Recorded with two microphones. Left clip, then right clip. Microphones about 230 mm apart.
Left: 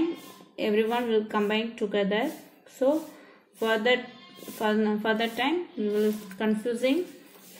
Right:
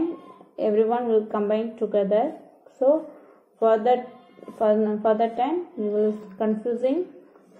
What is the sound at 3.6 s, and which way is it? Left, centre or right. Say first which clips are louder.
A woman's voice: right 5 dB; left.